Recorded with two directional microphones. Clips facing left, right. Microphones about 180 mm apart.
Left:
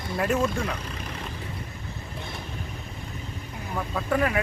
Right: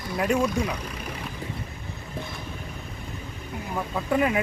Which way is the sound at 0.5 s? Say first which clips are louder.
Right 3 dB; 15° right (ahead or behind).